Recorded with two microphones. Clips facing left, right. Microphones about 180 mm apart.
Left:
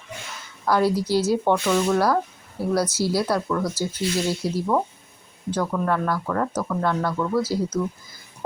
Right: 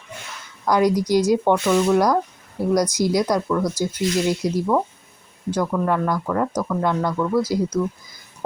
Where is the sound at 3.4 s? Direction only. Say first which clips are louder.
Right 3 dB; 5° right (ahead or behind).